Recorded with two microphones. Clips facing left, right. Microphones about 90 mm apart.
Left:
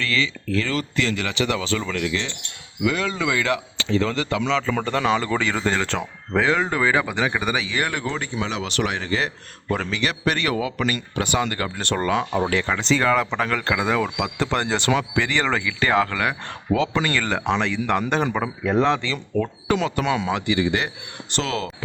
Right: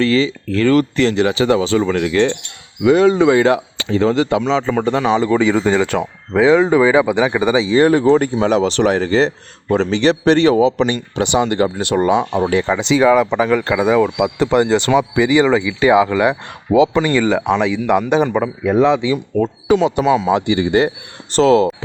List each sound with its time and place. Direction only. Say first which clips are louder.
0.0 s speech: right 10 dB; 35° right (ahead or behind)
2.8 s a man's voice: right 12 dB; 30° right (ahead or behind)
4.7 s a man's voice: right 6 dB; 15° right (ahead or behind)
12.9 s speech: right 8 dB; 10° right (ahead or behind)
20.2 s a man's voice: right 6 dB; 30° right (ahead or behind)